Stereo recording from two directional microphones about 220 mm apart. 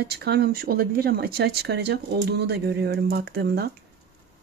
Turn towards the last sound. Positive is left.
turn(degrees=-45)  # may be behind; listen again after turning